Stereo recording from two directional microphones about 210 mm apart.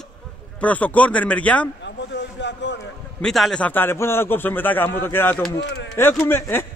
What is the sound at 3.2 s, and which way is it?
Speech, centre (ahead or behind).